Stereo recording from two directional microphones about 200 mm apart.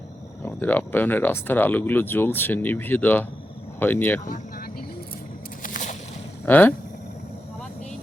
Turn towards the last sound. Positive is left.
turn(degrees=10)  # may be behind; listen again after turning